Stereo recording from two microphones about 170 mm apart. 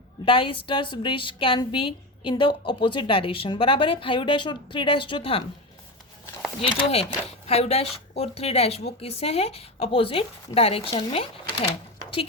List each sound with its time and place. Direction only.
0.3 s a woman's voice: 30° left (ahead or behind)
6.6 s speech: 35° left (ahead or behind)